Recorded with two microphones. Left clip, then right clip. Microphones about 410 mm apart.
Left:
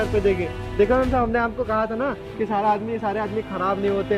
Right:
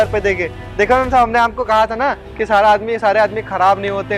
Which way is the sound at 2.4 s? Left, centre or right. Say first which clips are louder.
Right 10 dB; right.